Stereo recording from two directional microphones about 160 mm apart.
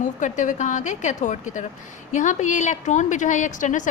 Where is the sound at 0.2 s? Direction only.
50° left (ahead or behind).